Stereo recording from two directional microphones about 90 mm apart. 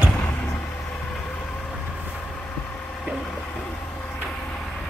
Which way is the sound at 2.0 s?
20° left (ahead or behind).